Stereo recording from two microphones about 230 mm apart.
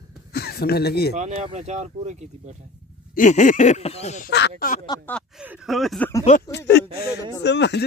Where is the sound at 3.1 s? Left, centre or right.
Left.